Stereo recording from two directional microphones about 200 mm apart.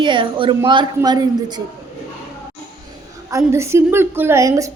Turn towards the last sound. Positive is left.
turn(degrees=-15)  # may be behind; listen again after turning